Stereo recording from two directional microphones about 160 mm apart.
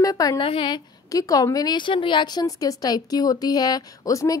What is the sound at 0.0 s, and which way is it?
A woman's voice, 20° left (ahead or behind).